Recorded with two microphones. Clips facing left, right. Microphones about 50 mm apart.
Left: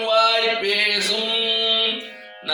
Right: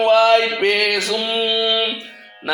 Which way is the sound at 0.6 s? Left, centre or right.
Right.